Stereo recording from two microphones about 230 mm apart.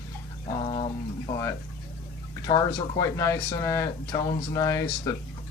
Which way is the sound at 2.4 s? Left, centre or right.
Centre.